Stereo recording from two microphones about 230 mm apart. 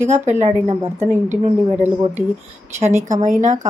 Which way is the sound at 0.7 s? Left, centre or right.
Centre.